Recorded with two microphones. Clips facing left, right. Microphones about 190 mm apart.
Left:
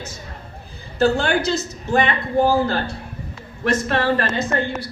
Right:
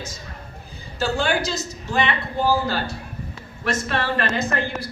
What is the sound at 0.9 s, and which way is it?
A woman's voice, 60° left (ahead or behind).